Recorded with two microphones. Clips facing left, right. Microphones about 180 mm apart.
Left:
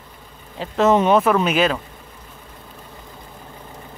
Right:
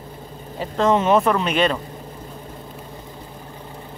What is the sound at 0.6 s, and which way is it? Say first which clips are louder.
Speech: left 2 dB; 5° left (ahead or behind).